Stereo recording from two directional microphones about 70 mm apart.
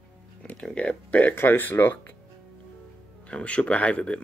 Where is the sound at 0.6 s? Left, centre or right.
Centre.